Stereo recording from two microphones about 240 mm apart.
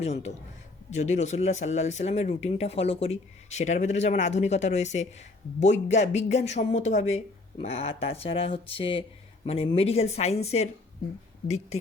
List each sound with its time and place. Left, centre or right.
0.0 s speech: left